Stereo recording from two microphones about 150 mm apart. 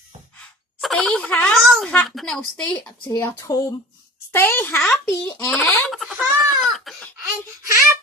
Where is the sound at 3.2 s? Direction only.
20° left (ahead or behind); by 7.0 s centre (ahead or behind).